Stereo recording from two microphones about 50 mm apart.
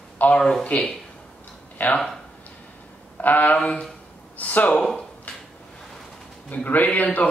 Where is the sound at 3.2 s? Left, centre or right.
Left.